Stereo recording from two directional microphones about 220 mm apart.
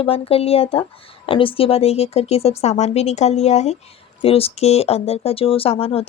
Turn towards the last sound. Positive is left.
turn(degrees=25)  # may be behind; listen again after turning